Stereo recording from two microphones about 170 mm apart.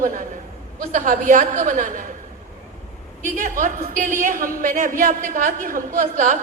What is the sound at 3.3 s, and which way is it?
A woman's voice, 50° right (ahead or behind).